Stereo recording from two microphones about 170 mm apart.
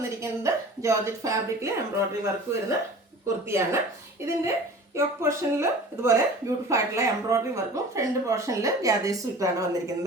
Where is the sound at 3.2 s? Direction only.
15° right (ahead or behind).